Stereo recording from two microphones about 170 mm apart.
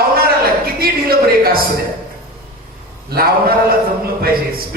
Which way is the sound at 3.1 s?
60° right (ahead or behind).